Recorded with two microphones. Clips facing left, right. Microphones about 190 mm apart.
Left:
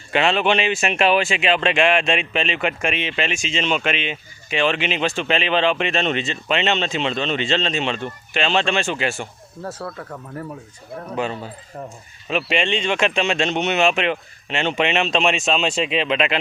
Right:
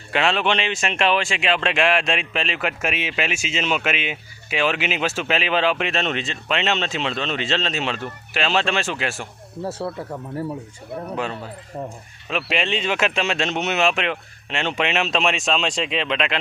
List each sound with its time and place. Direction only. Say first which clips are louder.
0.1 s speech: left 2 dB; centre (ahead or behind)
9.6 s speech: right 3 dB; 25° right (ahead or behind)
11.1 s speech: left 4 dB; centre (ahead or behind)